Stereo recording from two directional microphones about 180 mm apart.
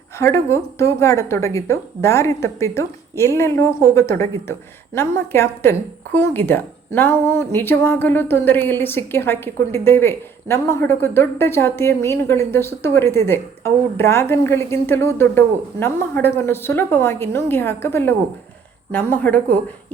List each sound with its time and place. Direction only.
0.2 s speech: 15° left (ahead or behind)